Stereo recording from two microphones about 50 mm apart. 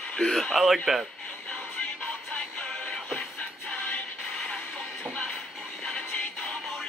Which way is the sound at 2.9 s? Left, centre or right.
Centre.